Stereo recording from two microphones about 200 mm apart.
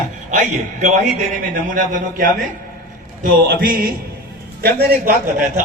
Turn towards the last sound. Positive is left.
turn(degrees=-45)  # may be behind; listen again after turning